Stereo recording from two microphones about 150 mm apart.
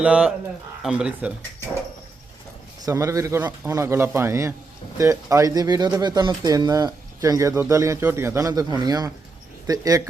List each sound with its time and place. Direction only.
0.0 s speech: 5° right (ahead or behind)
2.8 s speech: 20° right (ahead or behind)